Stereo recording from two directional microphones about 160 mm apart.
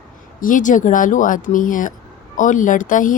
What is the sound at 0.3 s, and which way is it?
A woman's voice, 55° left (ahead or behind).